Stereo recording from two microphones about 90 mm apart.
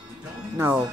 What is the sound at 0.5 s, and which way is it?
Speech, 30° right (ahead or behind).